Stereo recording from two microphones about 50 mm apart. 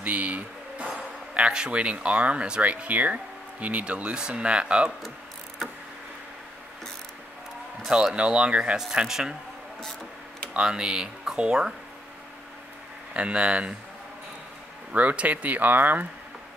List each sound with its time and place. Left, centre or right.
0.0 s speech: right
7.9 s speech: centre
9.0 s speech: centre
10.6 s speech: centre
13.1 s speech: right
14.9 s speech: right